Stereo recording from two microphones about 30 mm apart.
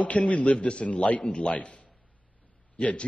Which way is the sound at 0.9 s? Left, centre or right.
Left.